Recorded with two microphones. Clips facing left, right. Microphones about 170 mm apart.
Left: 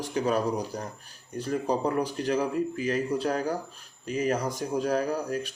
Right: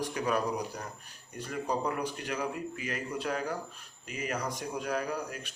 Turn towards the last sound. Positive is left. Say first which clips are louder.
# left 7 dB
turn(degrees=35)  # may be behind; listen again after turning